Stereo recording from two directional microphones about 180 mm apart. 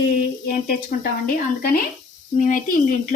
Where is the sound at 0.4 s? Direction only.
55° left (ahead or behind).